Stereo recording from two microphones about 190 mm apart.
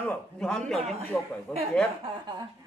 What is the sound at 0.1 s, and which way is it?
Speech, 5° left (ahead or behind).